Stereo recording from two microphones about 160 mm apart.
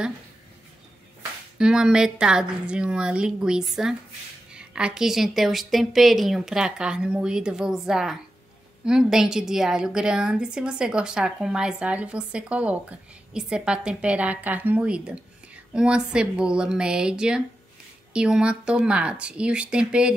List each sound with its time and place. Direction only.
1.6 s a woman's voice: 5° right (ahead or behind)